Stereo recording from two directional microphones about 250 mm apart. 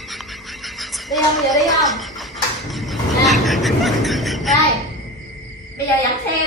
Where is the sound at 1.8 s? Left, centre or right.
Centre.